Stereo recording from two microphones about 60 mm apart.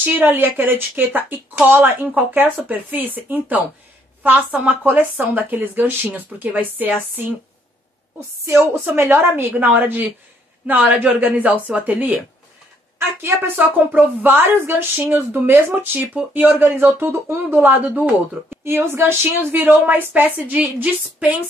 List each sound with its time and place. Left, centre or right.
0.0 s speech: right
8.9 s a woman's voice: right
13.2 s speech: right
17.6 s a woman's voice: right
18.5 s speech: right